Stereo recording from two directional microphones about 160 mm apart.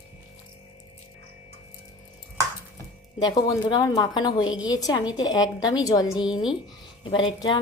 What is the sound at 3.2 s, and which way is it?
A woman's voice, 25° left (ahead or behind).